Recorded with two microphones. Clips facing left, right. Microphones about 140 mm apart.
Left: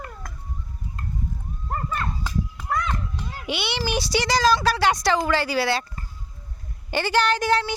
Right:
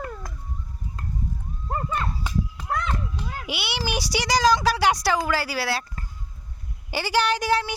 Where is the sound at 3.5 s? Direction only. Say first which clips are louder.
Left 4 dB; 10° right (ahead or behind).